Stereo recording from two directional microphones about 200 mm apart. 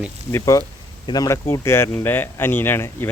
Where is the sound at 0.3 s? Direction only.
15° left (ahead or behind).